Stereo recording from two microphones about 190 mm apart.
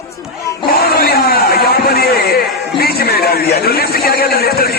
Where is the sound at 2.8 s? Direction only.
55° left (ahead or behind).